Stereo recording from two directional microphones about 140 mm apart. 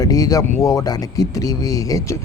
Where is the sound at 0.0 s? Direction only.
25° left (ahead or behind).